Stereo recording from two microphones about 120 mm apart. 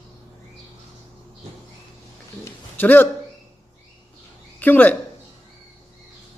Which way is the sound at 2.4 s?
15° left (ahead or behind).